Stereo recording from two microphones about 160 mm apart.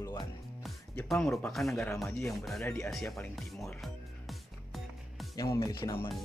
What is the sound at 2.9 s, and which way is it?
Speech, centre (ahead or behind).